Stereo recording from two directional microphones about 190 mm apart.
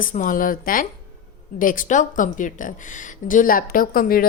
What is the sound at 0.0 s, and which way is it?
Speech, 45° left (ahead or behind).